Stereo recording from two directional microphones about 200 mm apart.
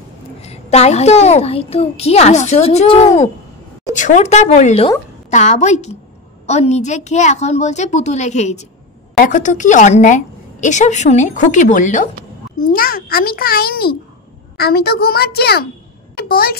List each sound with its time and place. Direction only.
0.4 s a woman's voice: 30° left (ahead or behind); by 16.5 s 50° left (ahead or behind)